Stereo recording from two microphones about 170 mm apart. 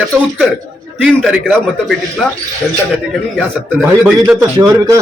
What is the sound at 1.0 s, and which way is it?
Speech, 5° right (ahead or behind).